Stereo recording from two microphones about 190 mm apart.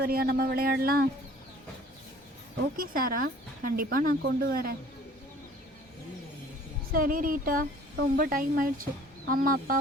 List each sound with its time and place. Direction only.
0.0 s speech: 55° right (ahead or behind)
2.7 s speech: 50° right (ahead or behind)
6.9 s speech: 45° right (ahead or behind)